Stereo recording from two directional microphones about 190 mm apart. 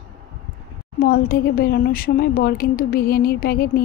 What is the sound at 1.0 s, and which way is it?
Speech, 50° left (ahead or behind).